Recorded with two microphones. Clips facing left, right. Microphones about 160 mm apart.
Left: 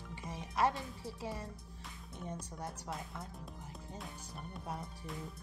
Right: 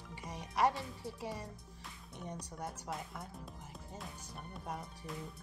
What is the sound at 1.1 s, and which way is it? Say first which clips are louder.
Speech: left 1 dB; 10° right (ahead or behind).